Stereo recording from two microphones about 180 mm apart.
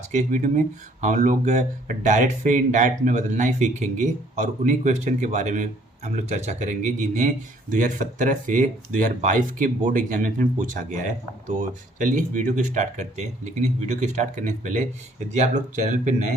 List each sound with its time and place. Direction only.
0.1 s speech: 45° right (ahead or behind)